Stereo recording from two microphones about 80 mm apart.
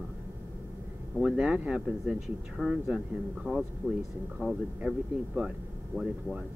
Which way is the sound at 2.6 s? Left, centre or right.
Centre.